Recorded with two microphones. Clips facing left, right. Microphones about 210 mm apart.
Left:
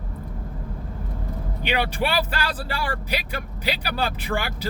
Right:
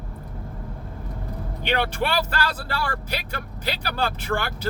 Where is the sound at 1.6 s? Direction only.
10° left (ahead or behind).